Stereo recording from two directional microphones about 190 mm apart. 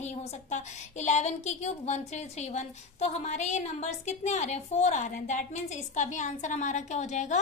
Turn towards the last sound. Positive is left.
turn(degrees=40)  # may be behind; listen again after turning